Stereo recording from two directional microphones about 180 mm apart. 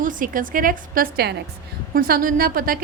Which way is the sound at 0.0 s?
50° right (ahead or behind).